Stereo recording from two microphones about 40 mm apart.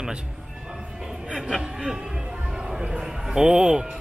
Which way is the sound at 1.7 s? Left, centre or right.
Centre.